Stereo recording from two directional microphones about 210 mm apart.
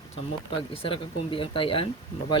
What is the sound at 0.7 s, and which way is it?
Speech, 25° left (ahead or behind).